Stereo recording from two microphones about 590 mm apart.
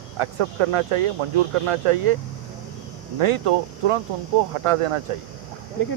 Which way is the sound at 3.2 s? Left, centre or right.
Right.